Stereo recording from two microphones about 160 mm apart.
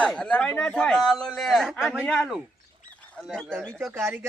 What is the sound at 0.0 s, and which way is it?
A man's voice, 5° left (ahead or behind).